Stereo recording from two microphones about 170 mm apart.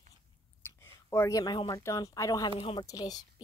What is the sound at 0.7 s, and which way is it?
Speech, 15° left (ahead or behind).